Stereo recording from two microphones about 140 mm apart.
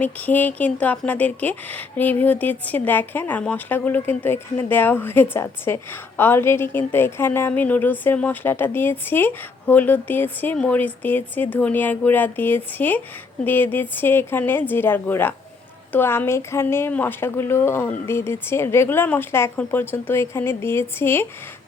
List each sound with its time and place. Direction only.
0.0 s speech: 10° left (ahead or behind)